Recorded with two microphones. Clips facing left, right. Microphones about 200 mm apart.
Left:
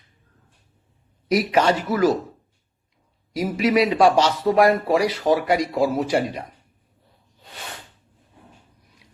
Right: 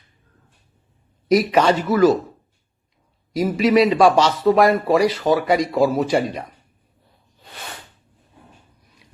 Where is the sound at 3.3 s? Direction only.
10° left (ahead or behind).